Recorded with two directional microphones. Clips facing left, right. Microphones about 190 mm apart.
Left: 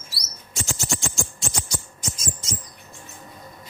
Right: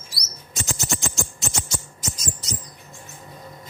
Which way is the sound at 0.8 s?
20° right (ahead or behind).